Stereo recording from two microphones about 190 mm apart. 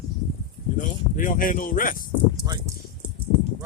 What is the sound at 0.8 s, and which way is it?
Speech, 45° left (ahead or behind).